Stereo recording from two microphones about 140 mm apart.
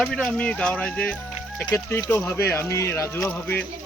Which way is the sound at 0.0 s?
5° left (ahead or behind).